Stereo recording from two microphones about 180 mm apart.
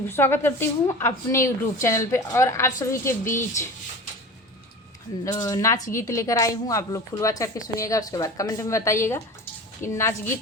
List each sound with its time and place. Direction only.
0.1 s a woman's voice: 15° left (ahead or behind)
5.2 s a woman's voice: 20° left (ahead or behind)